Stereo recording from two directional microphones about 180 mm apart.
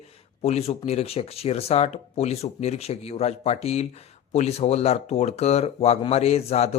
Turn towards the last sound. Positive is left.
turn(degrees=35)  # may be behind; listen again after turning